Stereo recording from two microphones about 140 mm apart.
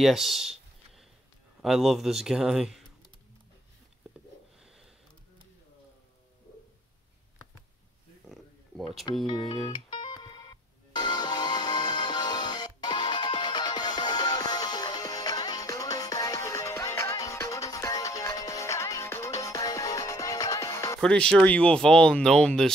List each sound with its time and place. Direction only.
0.0 s a sound: centre (ahead or behind)
1.6 s a man's voice: centre (ahead or behind)
9.1 s speech: 35° left (ahead or behind)
9.9 s music: 35° left (ahead or behind)
21.0 s speech: 5° left (ahead or behind)